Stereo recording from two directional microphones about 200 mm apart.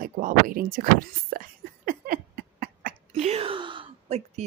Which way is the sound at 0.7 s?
45° right (ahead or behind).